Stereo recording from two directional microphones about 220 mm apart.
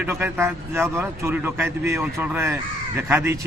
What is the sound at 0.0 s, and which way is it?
Speech, 10° right (ahead or behind).